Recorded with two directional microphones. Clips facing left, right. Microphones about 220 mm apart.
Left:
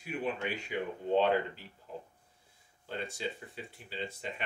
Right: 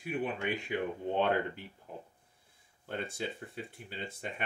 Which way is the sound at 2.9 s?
55° right (ahead or behind).